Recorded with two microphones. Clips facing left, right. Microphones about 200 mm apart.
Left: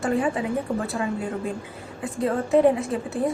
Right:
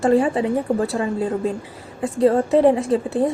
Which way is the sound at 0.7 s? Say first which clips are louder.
Right 6 dB; 45° right (ahead or behind).